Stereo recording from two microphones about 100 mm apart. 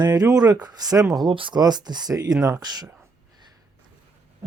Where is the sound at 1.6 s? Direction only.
45° right (ahead or behind).